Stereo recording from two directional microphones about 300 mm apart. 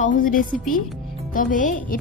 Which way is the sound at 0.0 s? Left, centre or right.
Left.